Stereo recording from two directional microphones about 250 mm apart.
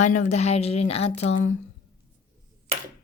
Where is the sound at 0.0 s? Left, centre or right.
Left.